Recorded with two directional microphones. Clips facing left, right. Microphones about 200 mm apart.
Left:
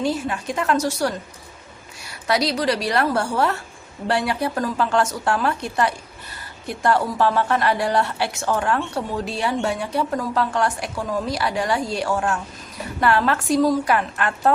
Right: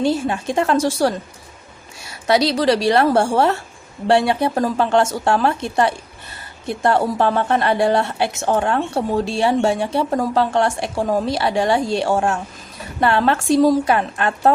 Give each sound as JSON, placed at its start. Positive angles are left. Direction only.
{"t": 0.0, "sound": "a woman's voice", "side_deg": -30}